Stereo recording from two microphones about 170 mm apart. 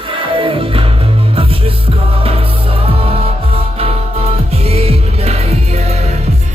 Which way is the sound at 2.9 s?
35° right (ahead or behind).